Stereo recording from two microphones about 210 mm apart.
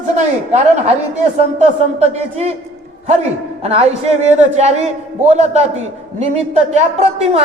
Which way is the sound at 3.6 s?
30° right (ahead or behind).